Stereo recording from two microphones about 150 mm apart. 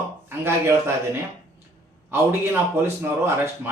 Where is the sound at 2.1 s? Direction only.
15° right (ahead or behind).